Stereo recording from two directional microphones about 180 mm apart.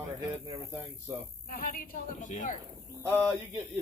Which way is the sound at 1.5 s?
50° left (ahead or behind).